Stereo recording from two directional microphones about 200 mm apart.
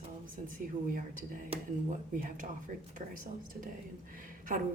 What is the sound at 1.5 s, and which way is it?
Speech, 30° right (ahead or behind).